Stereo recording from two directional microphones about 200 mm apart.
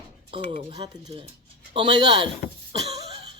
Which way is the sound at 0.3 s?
30° right (ahead or behind).